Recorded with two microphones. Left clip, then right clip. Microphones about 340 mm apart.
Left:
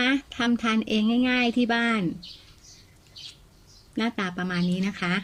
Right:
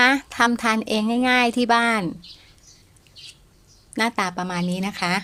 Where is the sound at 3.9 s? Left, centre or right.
Centre.